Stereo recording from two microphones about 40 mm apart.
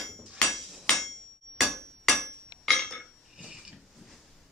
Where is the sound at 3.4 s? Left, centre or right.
Centre.